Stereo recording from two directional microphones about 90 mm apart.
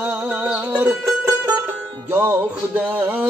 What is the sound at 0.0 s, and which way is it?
Music, 15° right (ahead or behind).